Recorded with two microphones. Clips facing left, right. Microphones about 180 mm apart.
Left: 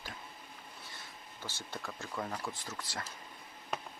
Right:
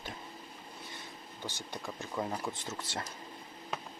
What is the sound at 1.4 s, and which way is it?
Speech, 15° right (ahead or behind).